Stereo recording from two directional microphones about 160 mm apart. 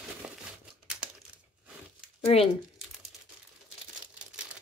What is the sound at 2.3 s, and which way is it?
Speech, 40° left (ahead or behind).